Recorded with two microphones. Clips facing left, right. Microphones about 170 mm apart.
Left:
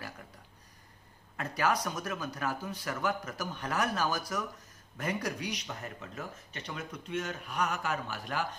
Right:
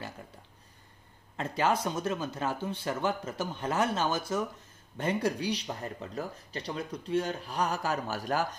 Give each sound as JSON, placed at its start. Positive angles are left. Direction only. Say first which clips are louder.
{"t": 1.3, "sound": "speech", "louder": "right 2 dB", "side_deg": -25}